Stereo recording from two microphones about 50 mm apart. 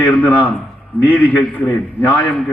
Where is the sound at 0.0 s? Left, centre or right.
Left.